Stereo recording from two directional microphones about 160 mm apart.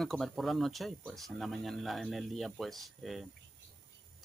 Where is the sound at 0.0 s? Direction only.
Centre (ahead or behind).